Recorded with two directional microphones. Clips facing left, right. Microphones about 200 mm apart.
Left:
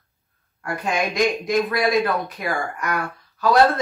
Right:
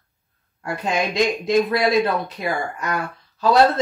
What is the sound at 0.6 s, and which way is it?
Speech, 25° right (ahead or behind).